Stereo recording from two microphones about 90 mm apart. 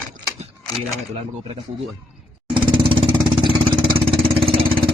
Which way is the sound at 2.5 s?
65° right (ahead or behind).